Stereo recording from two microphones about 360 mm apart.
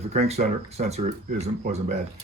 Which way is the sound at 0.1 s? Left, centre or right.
Centre.